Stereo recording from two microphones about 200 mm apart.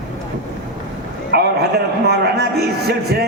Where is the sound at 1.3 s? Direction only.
55° right (ahead or behind).